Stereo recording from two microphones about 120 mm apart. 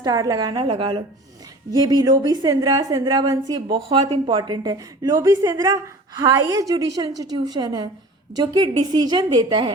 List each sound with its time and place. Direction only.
0.0 s a woman's voice: 30° right (ahead or behind)
0.6 s a woman's voice: 45° right (ahead or behind)